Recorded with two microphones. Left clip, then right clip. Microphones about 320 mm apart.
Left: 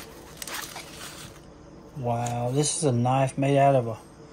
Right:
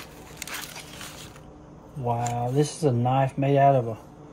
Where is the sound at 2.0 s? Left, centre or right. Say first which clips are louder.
Right 1 dB; centre.